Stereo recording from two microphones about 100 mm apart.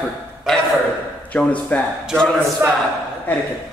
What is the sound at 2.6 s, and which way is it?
Speech, 25° right (ahead or behind).